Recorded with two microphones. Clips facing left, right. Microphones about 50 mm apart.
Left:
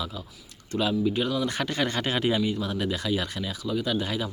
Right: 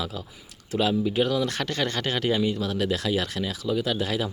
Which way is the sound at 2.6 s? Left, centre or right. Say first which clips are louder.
Right 2 dB; centre.